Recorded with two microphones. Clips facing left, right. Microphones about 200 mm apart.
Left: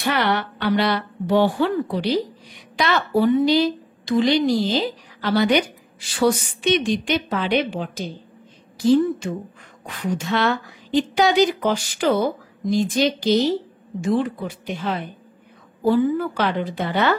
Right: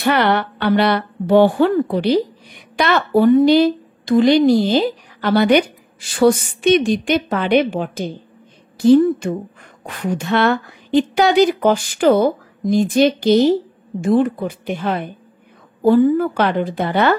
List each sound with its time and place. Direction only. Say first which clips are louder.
0.0 s a woman's voice: right 5 dB; 60° right (ahead or behind)